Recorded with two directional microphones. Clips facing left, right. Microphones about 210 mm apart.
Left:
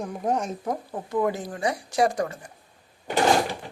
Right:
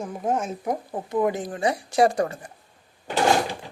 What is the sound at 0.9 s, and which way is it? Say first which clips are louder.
Speech: right 1 dB; 20° right (ahead or behind).